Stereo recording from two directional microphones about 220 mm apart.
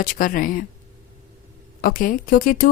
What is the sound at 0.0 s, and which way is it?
Speech, 40° left (ahead or behind).